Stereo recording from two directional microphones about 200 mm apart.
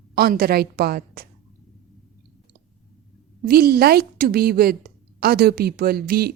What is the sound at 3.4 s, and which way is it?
A woman's voice, 50° right (ahead or behind).